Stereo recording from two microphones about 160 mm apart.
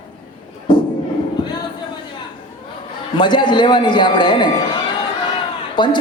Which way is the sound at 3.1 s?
30° left (ahead or behind).